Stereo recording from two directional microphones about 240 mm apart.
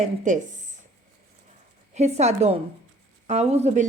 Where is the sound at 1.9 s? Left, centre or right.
Right.